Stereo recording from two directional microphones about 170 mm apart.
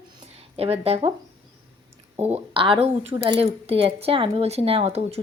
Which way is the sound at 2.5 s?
30° right (ahead or behind).